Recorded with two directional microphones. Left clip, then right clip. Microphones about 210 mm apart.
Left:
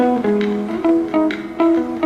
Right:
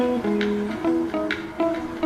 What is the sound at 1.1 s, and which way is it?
Music, centre (ahead or behind).